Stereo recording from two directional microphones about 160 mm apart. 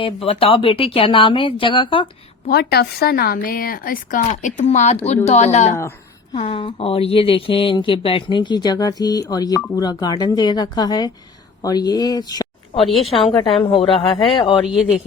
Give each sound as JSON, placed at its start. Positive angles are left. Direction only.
{"t": 0.0, "sound": "speech", "side_deg": 35}
{"t": 2.5, "sound": "a woman's voice", "side_deg": 90}
{"t": 12.8, "sound": "a woman's voice", "side_deg": 0}
{"t": 13.6, "sound": "speech", "side_deg": 35}